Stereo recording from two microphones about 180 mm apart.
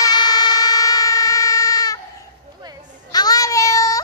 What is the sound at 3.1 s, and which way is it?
Child singing, 20° left (ahead or behind).